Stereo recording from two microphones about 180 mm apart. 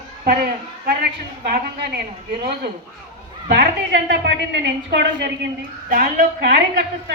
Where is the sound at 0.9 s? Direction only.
60° right (ahead or behind).